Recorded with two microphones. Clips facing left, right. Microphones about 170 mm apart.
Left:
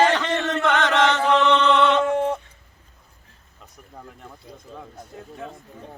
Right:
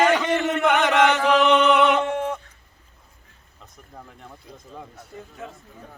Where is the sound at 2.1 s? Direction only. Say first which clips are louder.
Left 4 dB; 35° left (ahead or behind).